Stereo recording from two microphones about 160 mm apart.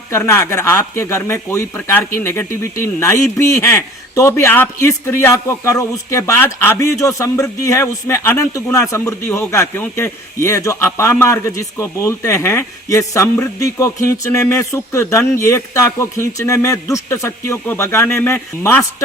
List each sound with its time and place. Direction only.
0.1 s speech: 15° left (ahead or behind)